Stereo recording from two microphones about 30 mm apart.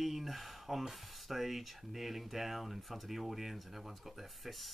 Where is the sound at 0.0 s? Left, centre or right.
Centre.